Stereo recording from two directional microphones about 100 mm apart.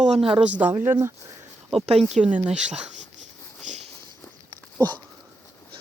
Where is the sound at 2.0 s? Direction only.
5° right (ahead or behind).